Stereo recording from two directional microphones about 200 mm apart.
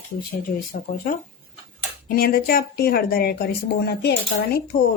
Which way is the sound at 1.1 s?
45° left (ahead or behind).